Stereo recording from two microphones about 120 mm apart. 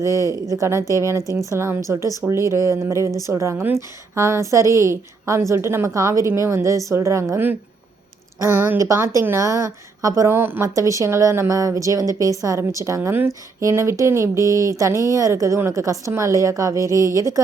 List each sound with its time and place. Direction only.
0.0 s a woman's voice: 25° right (ahead or behind)